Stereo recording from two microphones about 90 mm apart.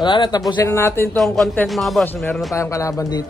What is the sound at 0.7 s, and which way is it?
Speech, 30° left (ahead or behind).